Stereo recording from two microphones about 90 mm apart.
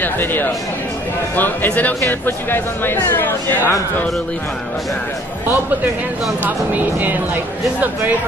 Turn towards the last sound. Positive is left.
turn(degrees=-20)  # may be behind; listen again after turning